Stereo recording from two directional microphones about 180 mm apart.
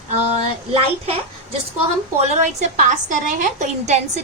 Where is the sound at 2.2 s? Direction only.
40° right (ahead or behind).